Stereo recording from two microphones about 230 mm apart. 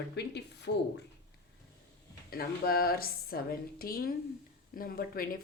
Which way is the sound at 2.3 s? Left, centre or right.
Left.